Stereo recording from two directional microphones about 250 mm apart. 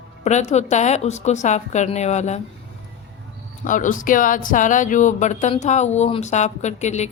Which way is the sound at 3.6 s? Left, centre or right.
Left.